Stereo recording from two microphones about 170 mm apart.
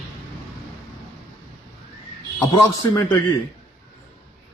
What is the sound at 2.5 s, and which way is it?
Speech, 25° left (ahead or behind).